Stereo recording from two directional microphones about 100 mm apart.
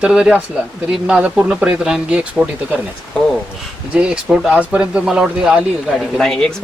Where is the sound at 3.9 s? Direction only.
10° right (ahead or behind).